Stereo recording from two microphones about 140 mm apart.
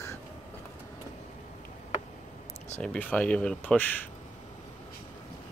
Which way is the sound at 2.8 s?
10° left (ahead or behind).